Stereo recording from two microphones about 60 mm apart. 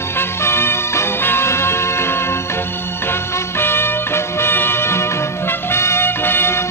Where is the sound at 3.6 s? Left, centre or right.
Left.